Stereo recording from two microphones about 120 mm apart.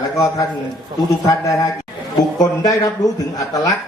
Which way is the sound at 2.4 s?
30° left (ahead or behind).